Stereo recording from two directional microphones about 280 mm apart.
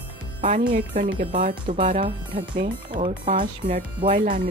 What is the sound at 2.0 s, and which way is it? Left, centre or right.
A woman's voice, centre.